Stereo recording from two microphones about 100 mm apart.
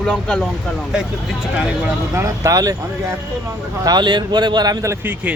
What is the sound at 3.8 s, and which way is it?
Speech, 45° right (ahead or behind).